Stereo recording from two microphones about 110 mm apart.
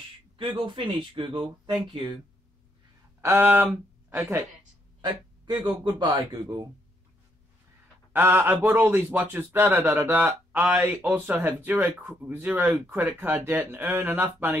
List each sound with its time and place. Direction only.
0.4 s speech: 50° right (ahead or behind)
3.2 s speech: 20° right (ahead or behind)
5.0 s a man's voice: 45° right (ahead or behind)
8.1 s a man's voice: 20° right (ahead or behind)